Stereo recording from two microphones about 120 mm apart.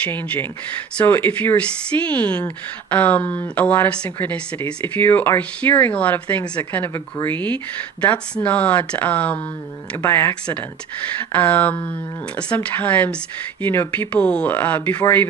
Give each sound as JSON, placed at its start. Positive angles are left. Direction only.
{"t": 0.0, "sound": "speech", "side_deg": 15}